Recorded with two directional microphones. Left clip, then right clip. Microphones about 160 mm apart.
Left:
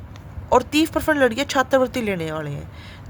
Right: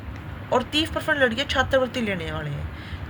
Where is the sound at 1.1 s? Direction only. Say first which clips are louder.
Even; 90° left.